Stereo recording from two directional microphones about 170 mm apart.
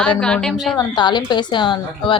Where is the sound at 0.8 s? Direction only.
25° left (ahead or behind).